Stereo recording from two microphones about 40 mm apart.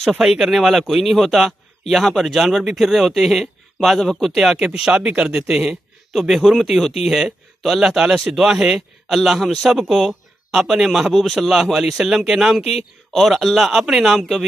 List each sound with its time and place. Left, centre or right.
0.2 s a man's voice: centre
4.7 s a man's voice: centre
6.1 s a man's voice: centre
9.4 s a man's voice: centre
9.7 s a man's voice: centre